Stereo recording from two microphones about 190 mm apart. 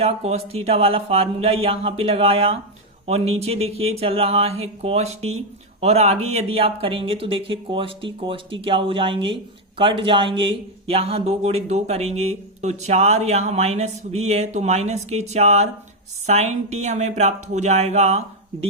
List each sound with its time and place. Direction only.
0.0 s speech: 35° right (ahead or behind)